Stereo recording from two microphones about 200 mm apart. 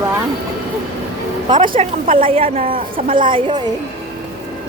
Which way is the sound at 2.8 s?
45° right (ahead or behind).